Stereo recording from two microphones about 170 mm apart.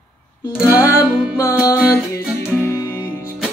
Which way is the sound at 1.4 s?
15° left (ahead or behind).